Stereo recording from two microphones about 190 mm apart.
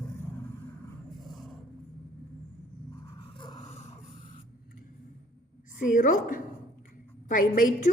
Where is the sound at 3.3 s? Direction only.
25° left (ahead or behind).